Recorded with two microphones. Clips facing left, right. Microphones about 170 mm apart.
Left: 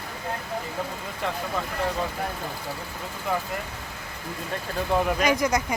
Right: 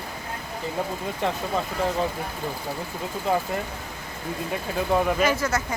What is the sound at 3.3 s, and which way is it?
Speech, 25° right (ahead or behind).